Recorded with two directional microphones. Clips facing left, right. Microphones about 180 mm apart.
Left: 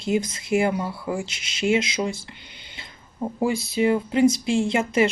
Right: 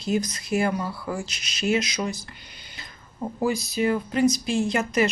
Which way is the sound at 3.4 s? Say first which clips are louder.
Left 2 dB; 25° left (ahead or behind).